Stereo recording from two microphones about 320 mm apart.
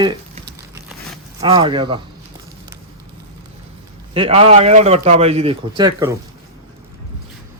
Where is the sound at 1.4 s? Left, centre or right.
Centre.